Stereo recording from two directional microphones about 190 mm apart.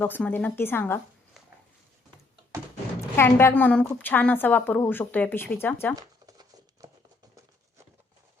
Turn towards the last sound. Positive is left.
turn(degrees=-20)  # may be behind; listen again after turning